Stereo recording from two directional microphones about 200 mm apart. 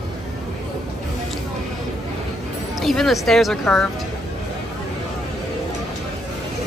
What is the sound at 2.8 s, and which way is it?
Speech, centre (ahead or behind).